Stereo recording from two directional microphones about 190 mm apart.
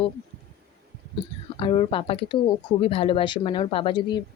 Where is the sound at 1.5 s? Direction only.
30° left (ahead or behind).